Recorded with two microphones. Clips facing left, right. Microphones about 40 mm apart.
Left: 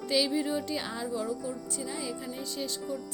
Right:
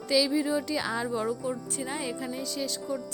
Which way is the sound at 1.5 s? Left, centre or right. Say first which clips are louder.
Right 3 dB; right.